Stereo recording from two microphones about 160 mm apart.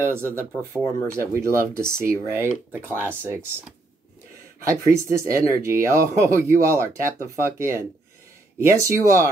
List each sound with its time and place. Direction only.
0.0 s speech: 15° right (ahead or behind)
4.6 s speech: 20° right (ahead or behind)